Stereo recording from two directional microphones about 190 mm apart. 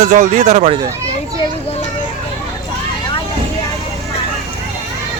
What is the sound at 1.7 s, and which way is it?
Children playing, 35° left (ahead or behind).